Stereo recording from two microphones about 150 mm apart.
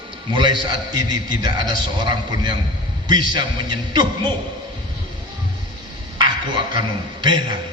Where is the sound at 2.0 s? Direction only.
30° right (ahead or behind).